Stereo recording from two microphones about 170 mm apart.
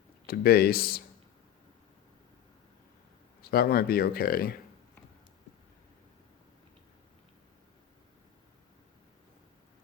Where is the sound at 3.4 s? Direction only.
65° left (ahead or behind).